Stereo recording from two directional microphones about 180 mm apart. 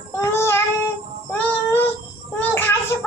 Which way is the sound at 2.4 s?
10° left (ahead or behind).